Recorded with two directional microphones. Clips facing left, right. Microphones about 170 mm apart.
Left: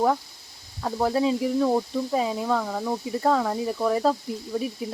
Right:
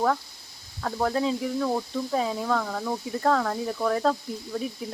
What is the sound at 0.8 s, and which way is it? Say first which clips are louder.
Speech: left 2 dB; 10° left (ahead or behind).